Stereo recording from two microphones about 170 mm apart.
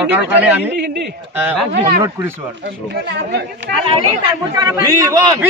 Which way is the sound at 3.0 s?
85° right.